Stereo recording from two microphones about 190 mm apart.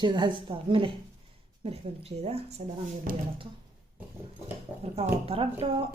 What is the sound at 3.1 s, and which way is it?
Speech, 50° right (ahead or behind).